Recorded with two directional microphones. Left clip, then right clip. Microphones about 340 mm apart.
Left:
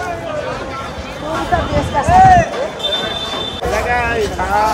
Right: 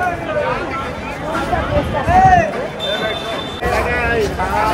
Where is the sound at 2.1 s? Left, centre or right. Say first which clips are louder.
Left 2 dB; left.